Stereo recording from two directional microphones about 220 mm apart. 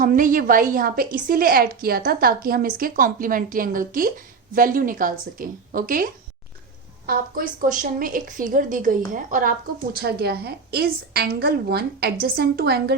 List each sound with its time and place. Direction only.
0.0 s a woman's voice: 40° right (ahead or behind)
7.1 s a woman's voice: 40° right (ahead or behind)